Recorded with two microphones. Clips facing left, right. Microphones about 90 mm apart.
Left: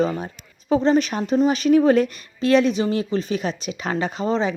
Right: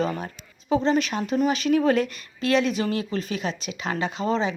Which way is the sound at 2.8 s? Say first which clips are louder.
Left 4 dB; 25° left (ahead or behind).